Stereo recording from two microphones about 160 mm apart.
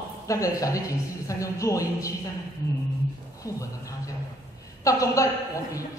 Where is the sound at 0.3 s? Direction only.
20° left (ahead or behind).